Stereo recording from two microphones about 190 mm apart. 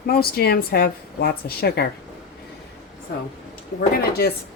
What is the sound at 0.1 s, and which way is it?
A woman's voice, 55° left (ahead or behind).